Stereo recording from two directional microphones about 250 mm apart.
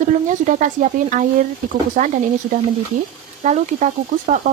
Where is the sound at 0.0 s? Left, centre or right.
Right.